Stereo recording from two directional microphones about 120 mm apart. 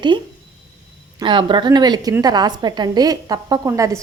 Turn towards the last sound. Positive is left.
turn(degrees=-25)  # may be behind; listen again after turning